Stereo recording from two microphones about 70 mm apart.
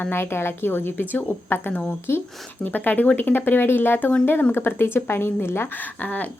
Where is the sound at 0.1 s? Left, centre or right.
Left.